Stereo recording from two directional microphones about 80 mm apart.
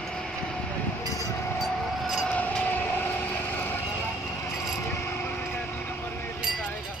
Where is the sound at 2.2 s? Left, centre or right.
Centre.